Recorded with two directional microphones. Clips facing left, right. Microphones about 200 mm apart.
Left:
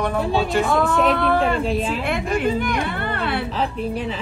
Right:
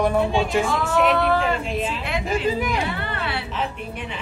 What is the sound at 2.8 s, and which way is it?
Music, 55° left (ahead or behind).